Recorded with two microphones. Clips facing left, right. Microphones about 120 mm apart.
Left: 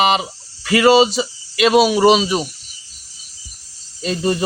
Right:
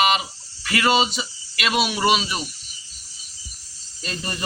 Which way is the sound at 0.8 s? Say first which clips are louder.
Left 8 dB; 35° left (ahead or behind).